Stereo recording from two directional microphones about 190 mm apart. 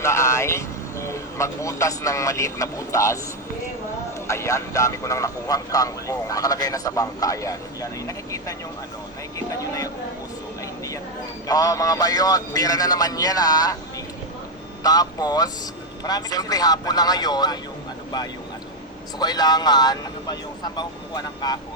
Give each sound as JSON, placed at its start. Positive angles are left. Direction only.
{"t": 0.0, "sound": "speech", "side_deg": 15}
{"t": 4.3, "sound": "a man's voice", "side_deg": 15}
{"t": 11.4, "sound": "a man's voice", "side_deg": 20}
{"t": 14.8, "sound": "a man's voice", "side_deg": 20}
{"t": 19.2, "sound": "a man's voice", "side_deg": 20}